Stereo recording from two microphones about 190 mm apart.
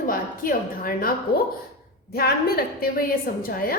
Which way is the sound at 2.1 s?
55° left (ahead or behind).